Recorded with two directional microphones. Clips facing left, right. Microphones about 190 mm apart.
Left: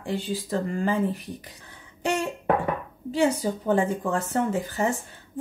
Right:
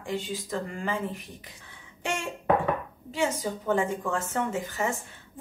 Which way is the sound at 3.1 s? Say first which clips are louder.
Left 5 dB; 35° left (ahead or behind).